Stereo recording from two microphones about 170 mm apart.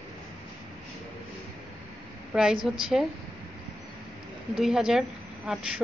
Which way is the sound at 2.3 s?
5° right (ahead or behind).